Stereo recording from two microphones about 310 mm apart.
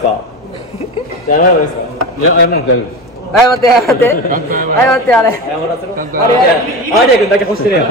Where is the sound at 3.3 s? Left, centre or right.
Centre.